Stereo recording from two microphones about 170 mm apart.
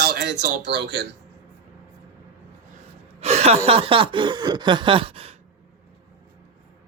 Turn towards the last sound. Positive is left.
turn(degrees=-35)  # may be behind; listen again after turning